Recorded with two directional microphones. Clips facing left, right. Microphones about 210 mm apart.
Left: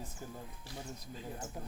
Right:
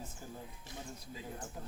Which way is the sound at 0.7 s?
20° right (ahead or behind).